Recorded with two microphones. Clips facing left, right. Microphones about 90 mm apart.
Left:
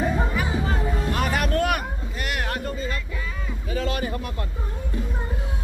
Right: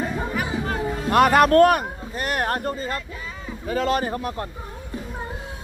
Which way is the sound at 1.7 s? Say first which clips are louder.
Right 4 dB; 40° right (ahead or behind).